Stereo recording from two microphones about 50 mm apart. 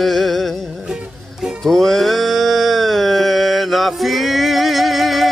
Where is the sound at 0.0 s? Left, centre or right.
Centre.